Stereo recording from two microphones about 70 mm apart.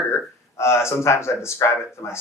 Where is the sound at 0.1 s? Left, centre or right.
Left.